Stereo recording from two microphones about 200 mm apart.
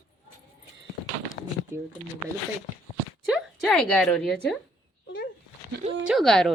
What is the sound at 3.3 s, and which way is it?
A woman's voice, centre (ahead or behind).